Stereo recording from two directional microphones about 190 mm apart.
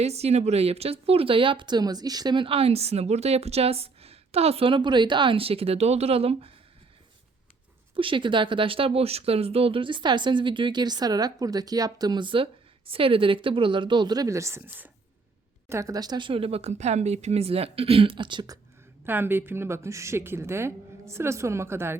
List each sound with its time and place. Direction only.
0.0 s speech: 35° right (ahead or behind)
7.9 s speech: 25° right (ahead or behind)
19.0 s a woman's voice: 10° right (ahead or behind)